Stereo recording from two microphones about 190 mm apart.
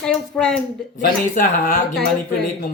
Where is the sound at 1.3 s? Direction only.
45° left (ahead or behind).